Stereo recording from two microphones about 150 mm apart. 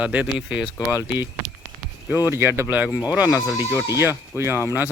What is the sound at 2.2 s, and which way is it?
Speech, 15° right (ahead or behind).